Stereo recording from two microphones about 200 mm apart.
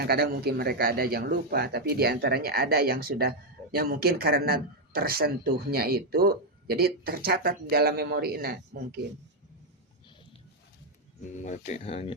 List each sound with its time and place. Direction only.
0.0 s speech: 50° right (ahead or behind)
11.3 s speech: 40° left (ahead or behind)